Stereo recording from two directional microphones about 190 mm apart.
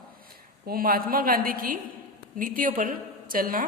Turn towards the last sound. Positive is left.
turn(degrees=-50)  # may be behind; listen again after turning